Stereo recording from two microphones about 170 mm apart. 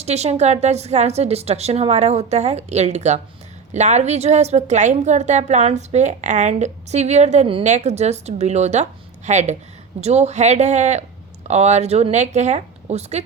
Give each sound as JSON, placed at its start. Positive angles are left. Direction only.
{"t": 0.0, "sound": "a woman's voice", "side_deg": -40}